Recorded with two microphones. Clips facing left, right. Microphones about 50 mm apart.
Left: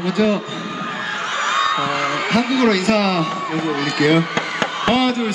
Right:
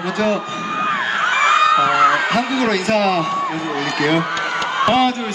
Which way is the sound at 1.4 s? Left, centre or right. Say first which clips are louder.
Right 5 dB; right.